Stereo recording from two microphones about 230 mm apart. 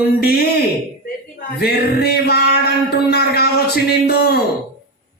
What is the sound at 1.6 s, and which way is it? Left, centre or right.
A man's voice, left.